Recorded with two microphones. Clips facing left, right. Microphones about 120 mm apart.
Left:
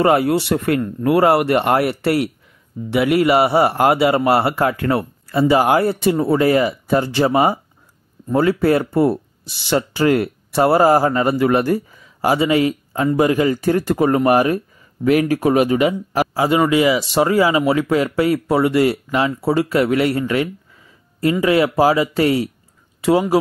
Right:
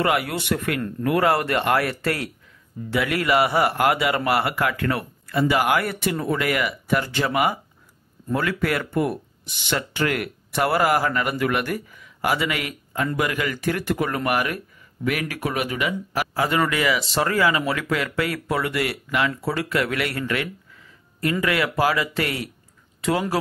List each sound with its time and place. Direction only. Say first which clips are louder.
0.0 s speech: left 8 dB; 25° left (ahead or behind)
16.3 s speech: left 7 dB; 20° left (ahead or behind)
22.9 s a sound: left 8 dB; 25° left (ahead or behind)